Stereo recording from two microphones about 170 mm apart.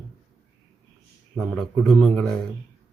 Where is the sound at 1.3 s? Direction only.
5° left (ahead or behind).